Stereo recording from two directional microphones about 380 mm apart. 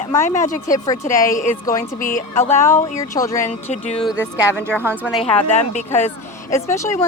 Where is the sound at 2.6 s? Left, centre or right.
Centre.